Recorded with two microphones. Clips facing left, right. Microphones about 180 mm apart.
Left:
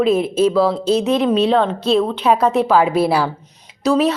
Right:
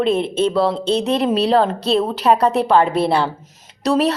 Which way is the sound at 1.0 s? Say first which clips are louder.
Left 2 dB; 35° right (ahead or behind).